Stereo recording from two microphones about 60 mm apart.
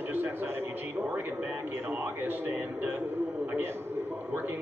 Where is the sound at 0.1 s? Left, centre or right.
Right.